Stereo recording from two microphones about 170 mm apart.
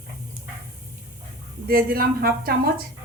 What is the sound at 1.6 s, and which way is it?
Speech, 60° right (ahead or behind).